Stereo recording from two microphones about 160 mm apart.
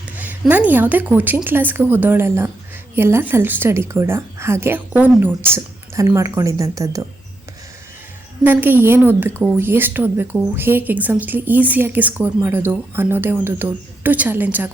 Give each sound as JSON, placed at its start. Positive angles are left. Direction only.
{"t": 0.2, "sound": "a woman's voice", "side_deg": -10}
{"t": 8.4, "sound": "a woman's voice", "side_deg": -10}